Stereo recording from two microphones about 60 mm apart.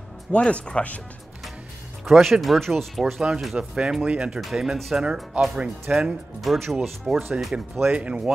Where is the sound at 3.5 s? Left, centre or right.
Centre.